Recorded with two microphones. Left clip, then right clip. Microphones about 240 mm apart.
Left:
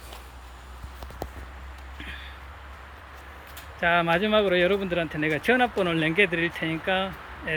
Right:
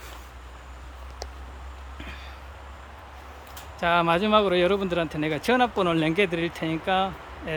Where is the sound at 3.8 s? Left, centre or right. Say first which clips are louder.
Even; centre.